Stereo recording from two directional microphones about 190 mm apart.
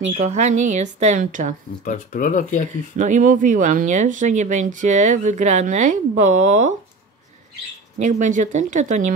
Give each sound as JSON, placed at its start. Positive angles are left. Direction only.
{"t": 0.2, "sound": "speech", "side_deg": -35}
{"t": 1.9, "sound": "speech", "side_deg": 45}
{"t": 3.0, "sound": "speech", "side_deg": -40}
{"t": 8.0, "sound": "speech", "side_deg": -40}